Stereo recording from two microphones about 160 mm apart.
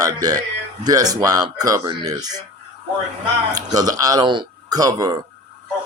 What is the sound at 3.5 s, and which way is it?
Speech, 25° right (ahead or behind).